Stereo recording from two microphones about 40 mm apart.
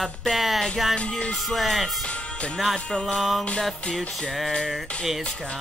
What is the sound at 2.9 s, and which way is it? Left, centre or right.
Music, centre.